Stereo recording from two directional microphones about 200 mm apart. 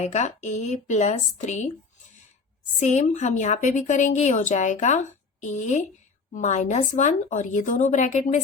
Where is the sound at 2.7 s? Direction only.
35° left (ahead or behind).